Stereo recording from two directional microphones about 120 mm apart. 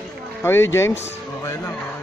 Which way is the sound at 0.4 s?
20° left (ahead or behind).